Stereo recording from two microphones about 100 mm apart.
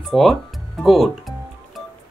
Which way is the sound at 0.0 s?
Centre (ahead or behind).